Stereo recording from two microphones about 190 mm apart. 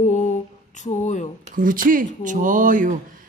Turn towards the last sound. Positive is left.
turn(degrees=-45)  # may be behind; listen again after turning